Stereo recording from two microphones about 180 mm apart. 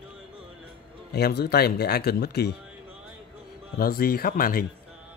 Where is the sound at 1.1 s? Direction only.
65° left (ahead or behind).